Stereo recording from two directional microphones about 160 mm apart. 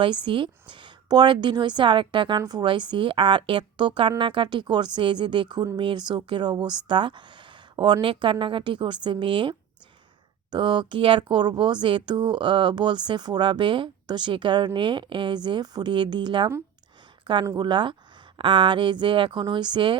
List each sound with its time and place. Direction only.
0.0 s speech: 30° right (ahead or behind)